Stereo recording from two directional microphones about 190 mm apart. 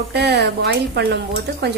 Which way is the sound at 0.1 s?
60° right (ahead or behind).